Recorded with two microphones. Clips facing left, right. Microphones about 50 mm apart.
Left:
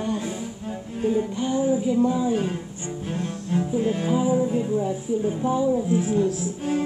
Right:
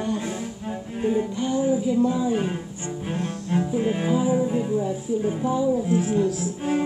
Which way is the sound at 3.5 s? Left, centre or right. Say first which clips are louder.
Even; right.